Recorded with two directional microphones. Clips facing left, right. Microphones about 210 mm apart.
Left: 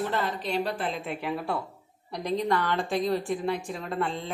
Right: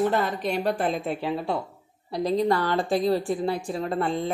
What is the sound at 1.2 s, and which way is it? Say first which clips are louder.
A woman's voice: right 3 dB; 25° right (ahead or behind).